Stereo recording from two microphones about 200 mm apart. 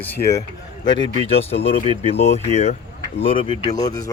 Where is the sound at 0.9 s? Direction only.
25° left (ahead or behind).